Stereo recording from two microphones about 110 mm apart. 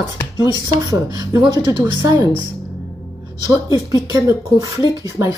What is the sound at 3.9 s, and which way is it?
Speech, 30° right (ahead or behind).